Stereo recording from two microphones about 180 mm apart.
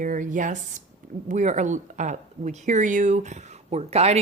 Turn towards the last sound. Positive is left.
turn(degrees=-35)  # may be behind; listen again after turning